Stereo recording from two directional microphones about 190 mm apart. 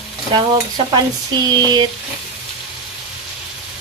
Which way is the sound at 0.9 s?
20° right (ahead or behind).